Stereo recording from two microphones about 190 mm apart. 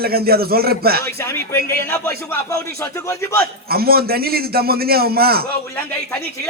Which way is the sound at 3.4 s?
55° right (ahead or behind).